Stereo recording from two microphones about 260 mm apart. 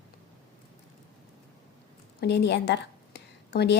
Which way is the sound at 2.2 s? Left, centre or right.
Left.